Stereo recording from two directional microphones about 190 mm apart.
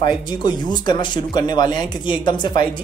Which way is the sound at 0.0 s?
20° left (ahead or behind).